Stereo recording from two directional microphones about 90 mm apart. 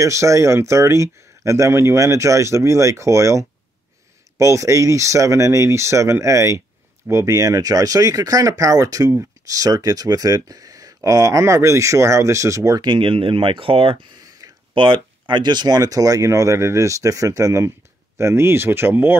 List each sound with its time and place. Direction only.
0.0 s speech: 35° right (ahead or behind)
12.8 s speech: 65° right (ahead or behind); by 13.9 s 90° right
14.7 s speech: 65° right (ahead or behind); by 19.1 s 25° right (ahead or behind)